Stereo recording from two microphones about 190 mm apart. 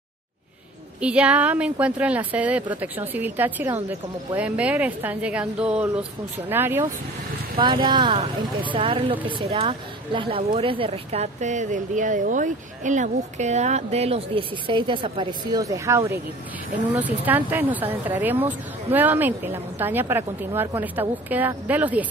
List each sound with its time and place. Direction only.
1.0 s speech: 5° right (ahead or behind)
7.5 s speech: 25° right (ahead or behind); by 22.0 s 10° right (ahead or behind)